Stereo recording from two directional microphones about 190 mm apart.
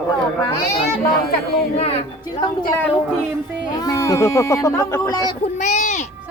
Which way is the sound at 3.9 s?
15° left (ahead or behind).